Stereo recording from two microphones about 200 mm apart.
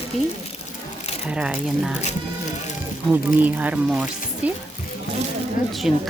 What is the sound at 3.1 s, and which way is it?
Speech, 10° right (ahead or behind).